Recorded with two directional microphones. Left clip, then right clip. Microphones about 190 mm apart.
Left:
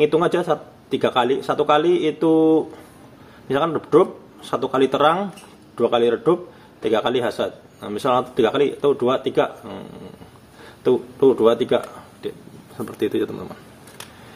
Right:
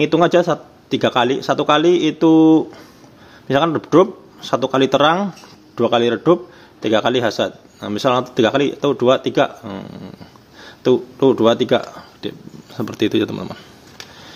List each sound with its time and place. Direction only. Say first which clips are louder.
0.0 s a man's voice: right 4 dB; 50° right (ahead or behind)